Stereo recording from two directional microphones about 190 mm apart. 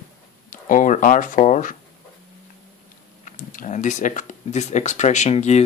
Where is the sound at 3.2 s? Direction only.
40° left (ahead or behind).